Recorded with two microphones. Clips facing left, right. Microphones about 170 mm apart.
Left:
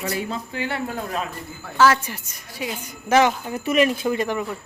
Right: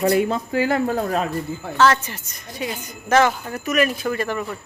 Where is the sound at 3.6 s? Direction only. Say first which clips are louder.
Left 1 dB; 25° left (ahead or behind).